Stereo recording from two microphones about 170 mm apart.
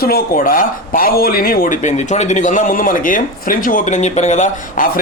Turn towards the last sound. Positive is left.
turn(degrees=45)  # may be behind; listen again after turning